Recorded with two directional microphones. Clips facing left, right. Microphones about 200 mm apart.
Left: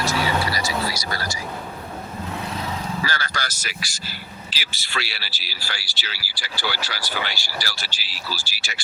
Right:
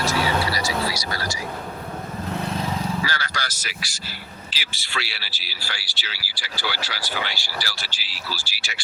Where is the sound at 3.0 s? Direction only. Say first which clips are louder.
Left 1 dB; 50° left (ahead or behind).